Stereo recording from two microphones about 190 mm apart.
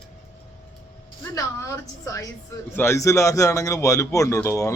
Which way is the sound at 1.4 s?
15° left (ahead or behind).